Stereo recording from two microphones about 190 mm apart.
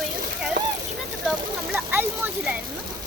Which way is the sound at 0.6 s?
55° right (ahead or behind).